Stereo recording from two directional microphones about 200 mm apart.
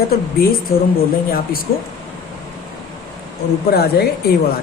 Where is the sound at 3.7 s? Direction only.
55° left (ahead or behind).